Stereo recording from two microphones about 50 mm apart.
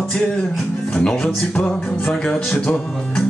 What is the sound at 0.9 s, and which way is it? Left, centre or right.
Speech, centre.